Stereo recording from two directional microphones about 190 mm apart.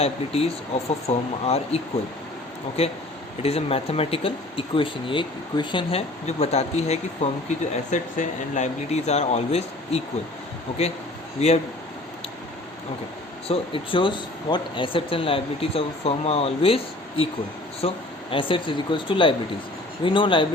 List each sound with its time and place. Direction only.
0.0 s speech: 30° left (ahead or behind)
11.3 s speech: 35° left (ahead or behind)
13.5 s speech: 25° left (ahead or behind)